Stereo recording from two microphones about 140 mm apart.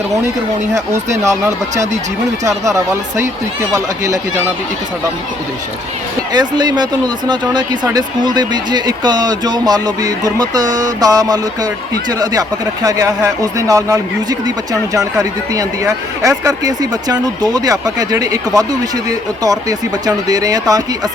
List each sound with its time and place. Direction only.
1.2 s speech: 20° right (ahead or behind)
1.7 s speech: 60° right (ahead or behind)
2.4 s speech: 25° right (ahead or behind)
6.3 s speech: 30° right (ahead or behind)